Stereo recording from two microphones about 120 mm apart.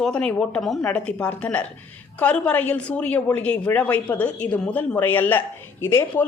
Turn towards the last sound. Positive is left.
turn(degrees=20)  # may be behind; listen again after turning